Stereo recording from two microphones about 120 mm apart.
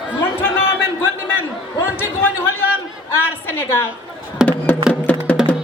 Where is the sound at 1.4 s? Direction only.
20° left (ahead or behind).